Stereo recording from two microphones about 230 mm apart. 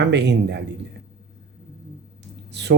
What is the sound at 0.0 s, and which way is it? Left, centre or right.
Speech, right.